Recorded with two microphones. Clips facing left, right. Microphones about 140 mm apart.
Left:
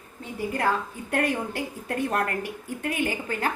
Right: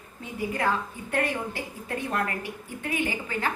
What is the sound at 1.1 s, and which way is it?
A woman's voice, 50° left (ahead or behind).